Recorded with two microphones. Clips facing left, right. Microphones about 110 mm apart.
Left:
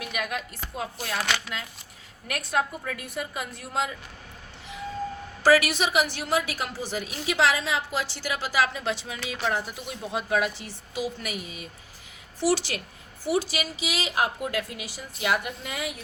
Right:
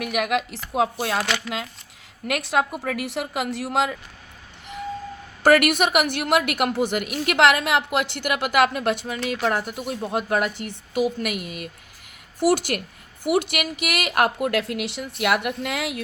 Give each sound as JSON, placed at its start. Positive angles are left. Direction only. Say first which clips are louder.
{"t": 0.0, "sound": "a woman's voice", "louder": "right 8 dB", "side_deg": -80}
{"t": 2.2, "sound": "a woman's voice", "louder": "right 5 dB", "side_deg": -90}
{"t": 5.4, "sound": "a woman's voice", "louder": "right 4 dB", "side_deg": -55}
{"t": 12.4, "sound": "a woman's voice", "louder": "right 5 dB", "side_deg": -50}
{"t": 13.2, "sound": "a woman's voice", "louder": "right 4 dB", "side_deg": -60}